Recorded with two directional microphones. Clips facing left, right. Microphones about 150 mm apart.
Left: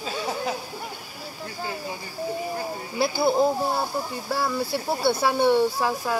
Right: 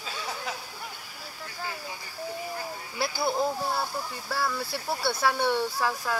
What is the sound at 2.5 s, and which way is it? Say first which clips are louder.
Speech: left 6 dB; 30° left (ahead or behind).